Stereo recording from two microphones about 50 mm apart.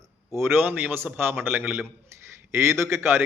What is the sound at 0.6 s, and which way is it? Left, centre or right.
Speech, right.